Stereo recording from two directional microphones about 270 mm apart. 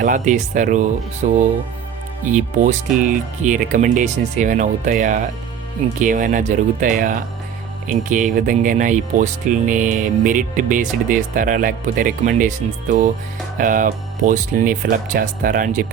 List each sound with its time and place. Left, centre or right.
0.0 s speech: right